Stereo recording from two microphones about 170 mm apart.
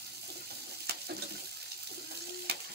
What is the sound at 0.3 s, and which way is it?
Water, 75° right (ahead or behind).